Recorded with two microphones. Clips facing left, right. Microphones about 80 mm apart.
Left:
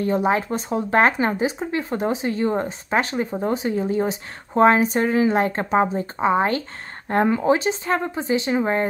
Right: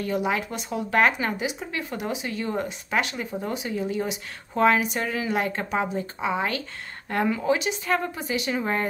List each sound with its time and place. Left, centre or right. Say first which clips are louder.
0.0 s a woman's voice: left 6 dB; left